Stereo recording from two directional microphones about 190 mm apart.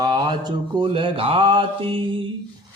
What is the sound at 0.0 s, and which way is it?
A man's voice, 20° right (ahead or behind).